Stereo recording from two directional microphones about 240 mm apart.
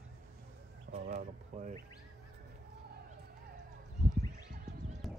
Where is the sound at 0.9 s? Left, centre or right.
Right.